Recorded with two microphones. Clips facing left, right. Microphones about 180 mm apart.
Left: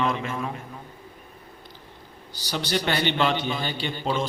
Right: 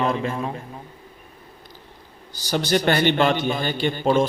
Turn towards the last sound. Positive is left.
turn(degrees=-50)  # may be behind; listen again after turning